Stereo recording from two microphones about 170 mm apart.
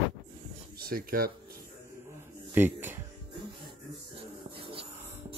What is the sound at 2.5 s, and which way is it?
Speech, 10° right (ahead or behind).